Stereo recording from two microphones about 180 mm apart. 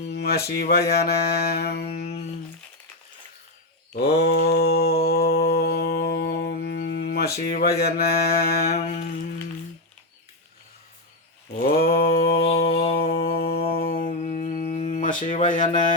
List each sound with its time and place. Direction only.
0.0 s a sound: 65° left (ahead or behind)
0.5 s music: 60° left (ahead or behind)
1.8 s music: 35° left (ahead or behind)
4.2 s mantra: 60° left (ahead or behind)
7.4 s music: 60° left (ahead or behind)
8.7 s music: 35° left (ahead or behind)
11.6 s mantra: 55° left (ahead or behind)
12.8 s music: 35° left (ahead or behind)
13.1 s humming: 60° left (ahead or behind)